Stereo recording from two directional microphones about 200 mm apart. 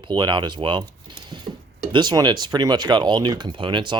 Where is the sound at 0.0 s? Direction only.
20° right (ahead or behind).